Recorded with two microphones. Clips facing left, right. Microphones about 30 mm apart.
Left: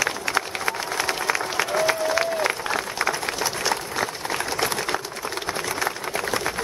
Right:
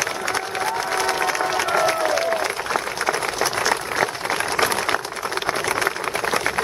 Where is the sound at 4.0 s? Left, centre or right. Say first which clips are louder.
Right 4 dB; right.